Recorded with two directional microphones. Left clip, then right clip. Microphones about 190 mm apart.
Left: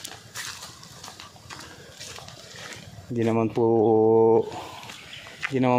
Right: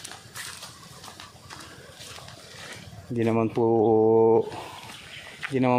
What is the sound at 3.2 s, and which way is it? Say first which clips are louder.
Speech: left 1 dB; centre (ahead or behind).